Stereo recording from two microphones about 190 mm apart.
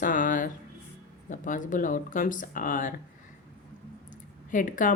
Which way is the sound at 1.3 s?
45° left (ahead or behind).